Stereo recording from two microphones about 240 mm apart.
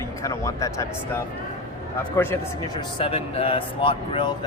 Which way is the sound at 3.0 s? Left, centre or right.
Left.